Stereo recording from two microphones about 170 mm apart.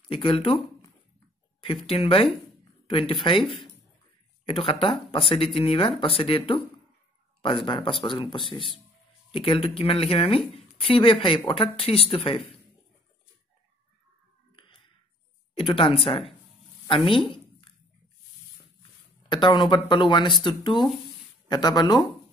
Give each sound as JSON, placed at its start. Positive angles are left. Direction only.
{"t": 0.1, "sound": "speech", "side_deg": 30}
{"t": 1.6, "sound": "speech", "side_deg": 30}
{"t": 14.5, "sound": "a sound", "side_deg": 30}
{"t": 15.5, "sound": "speech", "side_deg": 30}
{"t": 18.8, "sound": "speech", "side_deg": 25}